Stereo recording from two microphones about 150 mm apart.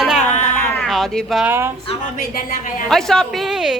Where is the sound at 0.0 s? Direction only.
5° right (ahead or behind).